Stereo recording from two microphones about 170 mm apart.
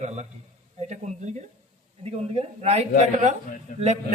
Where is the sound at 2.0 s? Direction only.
35° right (ahead or behind).